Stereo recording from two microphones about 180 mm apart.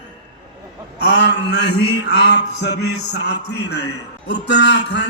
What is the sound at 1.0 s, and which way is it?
Mantra, 70° left (ahead or behind).